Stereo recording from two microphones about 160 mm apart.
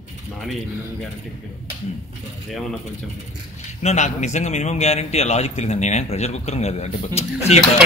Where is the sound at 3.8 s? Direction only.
45° left (ahead or behind).